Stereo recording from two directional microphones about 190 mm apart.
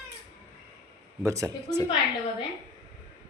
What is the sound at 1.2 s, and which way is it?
Speech, 15° right (ahead or behind).